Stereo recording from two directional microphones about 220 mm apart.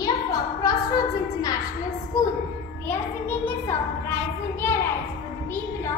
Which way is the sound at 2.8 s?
10° left (ahead or behind).